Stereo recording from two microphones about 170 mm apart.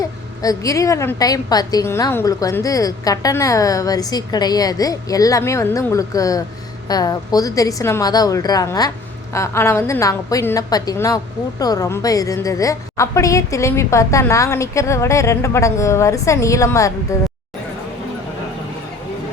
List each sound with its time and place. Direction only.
0.4 s a woman's voice: 20° left (ahead or behind)